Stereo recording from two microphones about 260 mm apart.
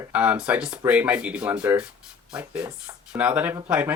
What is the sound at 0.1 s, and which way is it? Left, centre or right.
Speech, centre.